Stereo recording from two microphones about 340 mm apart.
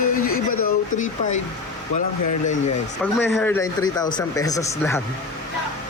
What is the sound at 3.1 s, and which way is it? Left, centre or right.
Speech, centre.